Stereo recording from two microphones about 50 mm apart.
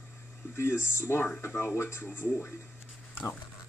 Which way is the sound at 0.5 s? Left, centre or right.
Left.